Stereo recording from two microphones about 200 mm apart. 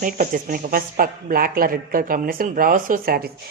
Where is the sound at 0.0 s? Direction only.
40° right (ahead or behind).